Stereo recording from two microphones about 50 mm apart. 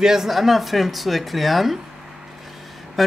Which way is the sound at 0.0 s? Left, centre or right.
Centre.